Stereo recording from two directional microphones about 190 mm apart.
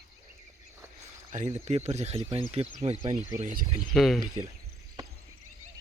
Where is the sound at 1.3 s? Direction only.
35° right (ahead or behind).